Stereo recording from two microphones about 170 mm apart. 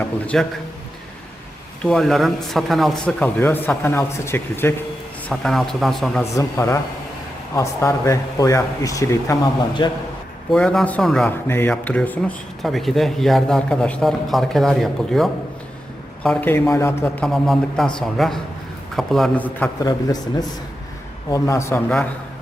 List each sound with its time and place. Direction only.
0.0 s speech: 10° left (ahead or behind)
1.8 s speech: 5° left (ahead or behind)
5.3 s speech: centre (ahead or behind)
6.3 s speech: 15° left (ahead or behind)
10.5 s speech: 5° left (ahead or behind)
11.4 s speech: 15° left (ahead or behind)
17.2 s speech: centre (ahead or behind)
21.2 s speech: 20° left (ahead or behind)